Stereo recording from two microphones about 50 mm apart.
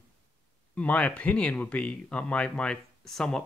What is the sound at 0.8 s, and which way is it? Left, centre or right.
Speech, left.